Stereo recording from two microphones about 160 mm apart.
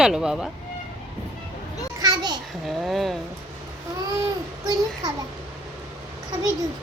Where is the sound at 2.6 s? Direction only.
Centre (ahead or behind).